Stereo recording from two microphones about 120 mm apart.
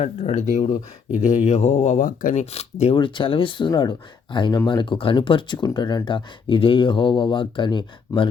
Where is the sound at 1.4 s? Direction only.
70° left (ahead or behind).